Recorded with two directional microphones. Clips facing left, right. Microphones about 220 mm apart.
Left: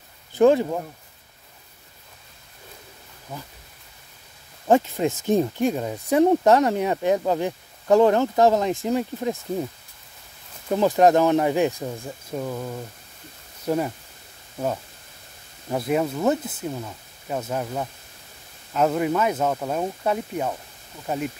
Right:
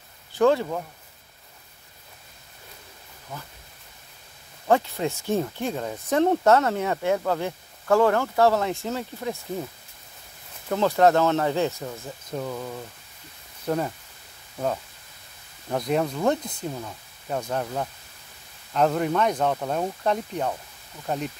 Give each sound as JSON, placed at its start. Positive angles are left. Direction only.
{"t": 0.4, "sound": "speech", "side_deg": 15}
{"t": 4.6, "sound": "speech", "side_deg": 15}
{"t": 10.7, "sound": "speech", "side_deg": 15}
{"t": 15.7, "sound": "speech", "side_deg": 5}